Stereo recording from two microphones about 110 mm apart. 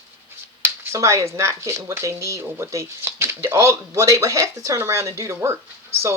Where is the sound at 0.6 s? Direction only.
25° right (ahead or behind).